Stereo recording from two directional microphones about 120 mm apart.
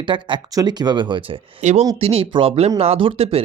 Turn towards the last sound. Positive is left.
turn(degrees=-55)  # may be behind; listen again after turning